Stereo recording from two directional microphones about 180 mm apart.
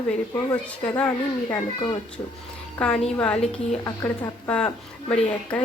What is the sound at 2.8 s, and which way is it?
A woman's voice, 5° left (ahead or behind).